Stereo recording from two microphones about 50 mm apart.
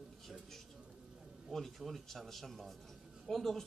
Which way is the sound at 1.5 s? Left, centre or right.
Centre.